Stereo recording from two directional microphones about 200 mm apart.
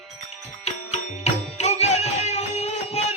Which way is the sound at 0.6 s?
35° left (ahead or behind).